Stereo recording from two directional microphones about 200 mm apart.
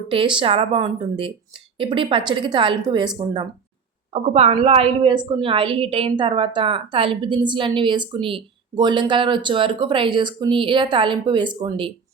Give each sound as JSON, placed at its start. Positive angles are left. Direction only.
{"t": 0.1, "sound": "a woman's voice", "side_deg": -25}
{"t": 4.1, "sound": "a woman's voice", "side_deg": -30}